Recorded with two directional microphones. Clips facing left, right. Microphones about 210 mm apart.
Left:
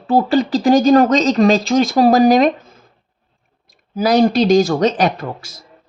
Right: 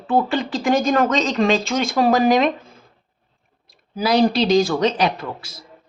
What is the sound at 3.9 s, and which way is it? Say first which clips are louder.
Speech: left 4 dB; 45° left (ahead or behind).